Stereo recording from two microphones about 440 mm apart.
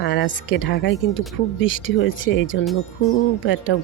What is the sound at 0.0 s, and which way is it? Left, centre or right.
Speech, left.